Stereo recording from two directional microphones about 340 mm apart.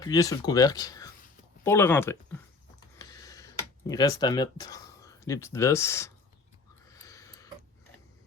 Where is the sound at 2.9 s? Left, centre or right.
Centre.